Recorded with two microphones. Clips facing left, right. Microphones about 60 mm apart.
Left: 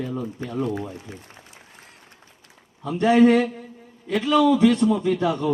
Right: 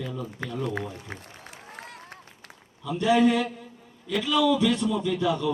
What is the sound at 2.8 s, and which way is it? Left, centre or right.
A man's voice, left.